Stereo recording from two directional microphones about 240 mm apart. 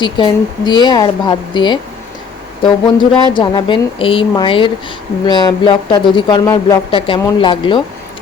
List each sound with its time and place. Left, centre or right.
0.0 s speech: centre